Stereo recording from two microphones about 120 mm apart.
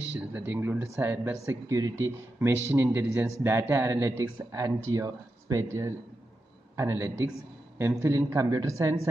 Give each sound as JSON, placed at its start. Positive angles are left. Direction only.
{"t": 0.1, "sound": "speech", "side_deg": -15}